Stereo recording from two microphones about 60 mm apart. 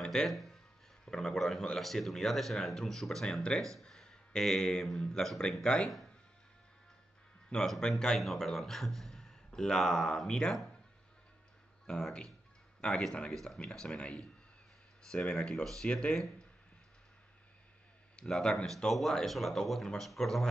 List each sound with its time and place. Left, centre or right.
0.0 s music: centre
0.3 s speech: centre
3.8 s a sound: centre
5.0 s speech: centre
7.4 s a man's voice: centre
11.8 s speech: centre
18.1 s speech: centre